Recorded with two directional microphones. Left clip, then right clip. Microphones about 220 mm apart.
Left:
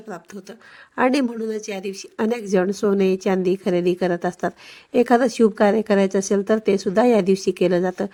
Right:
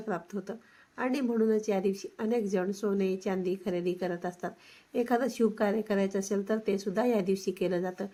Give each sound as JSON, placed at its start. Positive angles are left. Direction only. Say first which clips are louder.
{"t": 0.9, "sound": "a woman's voice", "louder": "left 10 dB", "side_deg": 45}